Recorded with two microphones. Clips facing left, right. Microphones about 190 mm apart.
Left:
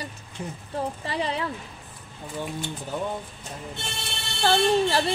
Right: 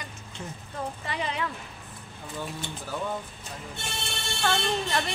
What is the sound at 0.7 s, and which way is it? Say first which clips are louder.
Speech: left 5 dB; 35° left (ahead or behind).